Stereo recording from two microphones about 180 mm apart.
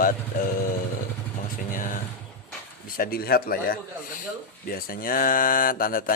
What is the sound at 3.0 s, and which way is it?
Speech, 55° left (ahead or behind).